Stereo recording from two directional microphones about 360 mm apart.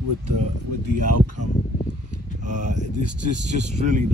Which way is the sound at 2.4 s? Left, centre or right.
Centre.